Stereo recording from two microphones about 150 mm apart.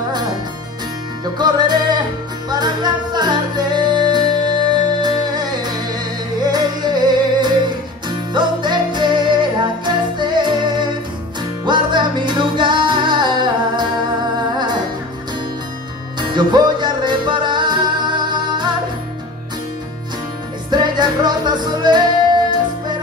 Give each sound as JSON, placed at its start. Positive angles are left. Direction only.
{"t": 1.2, "sound": "music", "side_deg": -30}
{"t": 16.2, "sound": "music", "side_deg": -30}
{"t": 20.7, "sound": "music", "side_deg": -30}